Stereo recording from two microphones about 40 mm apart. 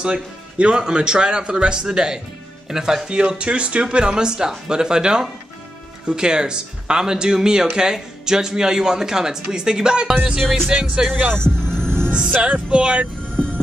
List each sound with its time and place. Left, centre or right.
0.0 s speech: right
3.2 s speech: right
11.5 s music: centre
12.1 s speech: right
13.2 s music: left